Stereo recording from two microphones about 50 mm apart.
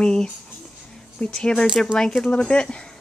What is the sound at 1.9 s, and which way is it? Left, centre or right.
Speech, centre.